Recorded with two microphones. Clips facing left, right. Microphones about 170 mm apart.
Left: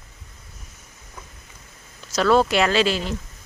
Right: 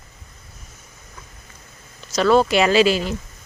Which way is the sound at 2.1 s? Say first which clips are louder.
Right 2 dB; centre (ahead or behind).